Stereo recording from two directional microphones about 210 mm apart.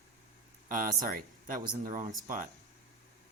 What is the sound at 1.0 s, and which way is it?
Speech, 40° right (ahead or behind).